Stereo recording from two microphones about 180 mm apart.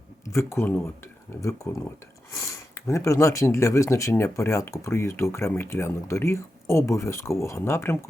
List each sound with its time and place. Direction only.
0.3 s speech: 15° left (ahead or behind)